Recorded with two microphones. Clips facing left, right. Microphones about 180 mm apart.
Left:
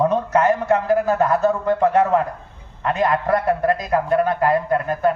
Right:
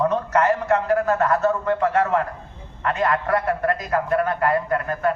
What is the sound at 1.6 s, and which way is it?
A man's voice, 30° left (ahead or behind).